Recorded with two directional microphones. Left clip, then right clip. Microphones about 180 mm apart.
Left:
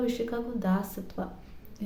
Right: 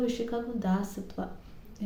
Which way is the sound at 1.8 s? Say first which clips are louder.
Right 1 dB; 15° left (ahead or behind).